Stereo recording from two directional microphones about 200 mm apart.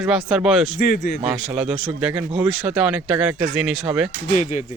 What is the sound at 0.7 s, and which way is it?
Speech, 50° left (ahead or behind).